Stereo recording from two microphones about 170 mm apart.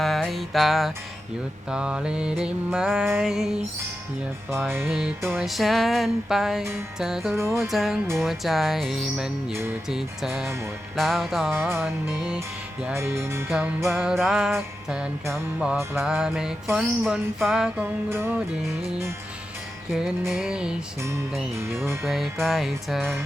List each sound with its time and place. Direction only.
0.0 s music: centre (ahead or behind)
4.7 s music: 15° right (ahead or behind)
5.4 s music: centre (ahead or behind)
7.3 s music: 15° right (ahead or behind)
7.7 s music: centre (ahead or behind)
12.8 s music: 15° right (ahead or behind)
13.9 s music: centre (ahead or behind)
20.3 s music: 5° right (ahead or behind)
22.0 s music: centre (ahead or behind)